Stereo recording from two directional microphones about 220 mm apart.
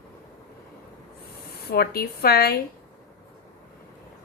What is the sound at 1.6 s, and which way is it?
Speech, 45° left (ahead or behind).